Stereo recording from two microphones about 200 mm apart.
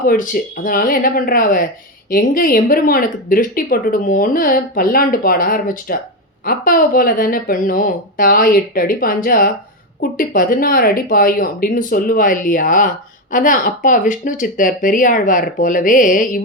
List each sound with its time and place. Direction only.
0.0 s a woman's voice: 45° left (ahead or behind)